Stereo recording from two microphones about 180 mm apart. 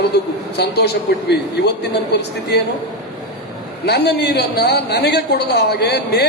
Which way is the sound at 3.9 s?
70° left (ahead or behind).